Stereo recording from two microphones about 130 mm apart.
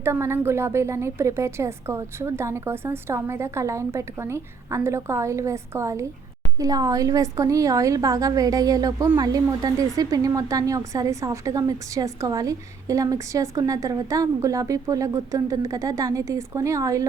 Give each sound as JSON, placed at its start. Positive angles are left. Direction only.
{"t": 0.0, "sound": "a woman's voice", "side_deg": -20}